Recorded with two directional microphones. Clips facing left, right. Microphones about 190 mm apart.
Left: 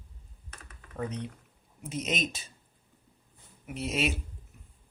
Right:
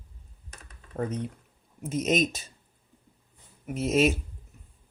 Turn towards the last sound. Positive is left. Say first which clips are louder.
# right 8 dB
turn(degrees=-45)  # may be behind; listen again after turning